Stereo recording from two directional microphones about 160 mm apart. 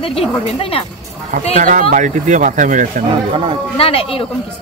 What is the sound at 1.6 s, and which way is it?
Speech, 55° right (ahead or behind).